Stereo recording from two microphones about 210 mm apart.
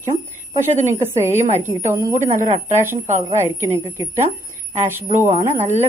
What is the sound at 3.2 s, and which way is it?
Speech, 10° right (ahead or behind).